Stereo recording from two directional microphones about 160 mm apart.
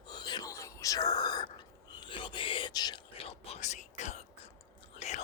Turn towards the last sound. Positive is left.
turn(degrees=45)  # may be behind; listen again after turning